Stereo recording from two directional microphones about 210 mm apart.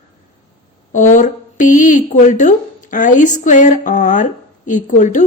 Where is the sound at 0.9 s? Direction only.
35° left (ahead or behind).